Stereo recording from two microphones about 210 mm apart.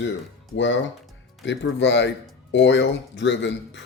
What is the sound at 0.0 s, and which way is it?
Speech, 60° left (ahead or behind).